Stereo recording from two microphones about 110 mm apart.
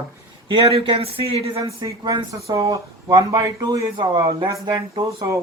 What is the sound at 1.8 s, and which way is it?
Speech, 45° right (ahead or behind).